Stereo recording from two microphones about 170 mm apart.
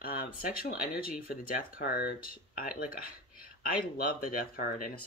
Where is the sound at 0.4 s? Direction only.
60° left (ahead or behind).